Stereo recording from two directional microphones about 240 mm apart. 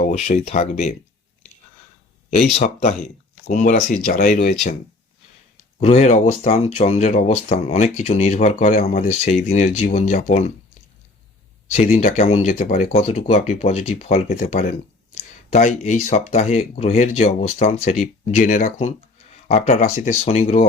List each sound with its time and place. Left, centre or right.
0.0 s speech: left
2.6 s speech: left
5.8 s speech: left
11.7 s speech: left